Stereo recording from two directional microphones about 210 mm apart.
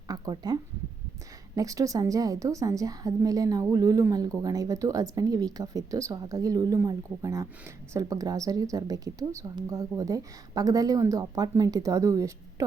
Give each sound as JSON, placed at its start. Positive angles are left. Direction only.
{"t": 0.1, "sound": "a woman's voice", "side_deg": -20}